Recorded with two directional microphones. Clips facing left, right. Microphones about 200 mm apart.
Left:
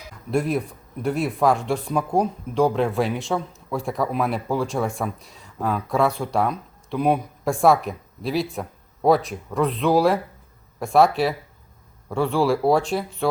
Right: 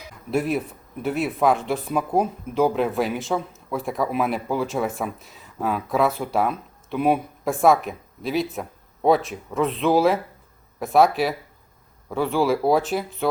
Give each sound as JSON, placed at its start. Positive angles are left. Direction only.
{"t": 0.3, "sound": "speech", "side_deg": -5}